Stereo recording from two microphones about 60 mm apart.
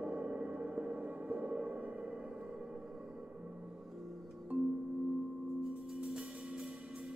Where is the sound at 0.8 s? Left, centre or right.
Right.